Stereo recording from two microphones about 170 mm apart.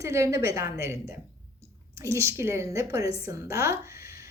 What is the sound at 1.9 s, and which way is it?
A woman's voice, 15° right (ahead or behind).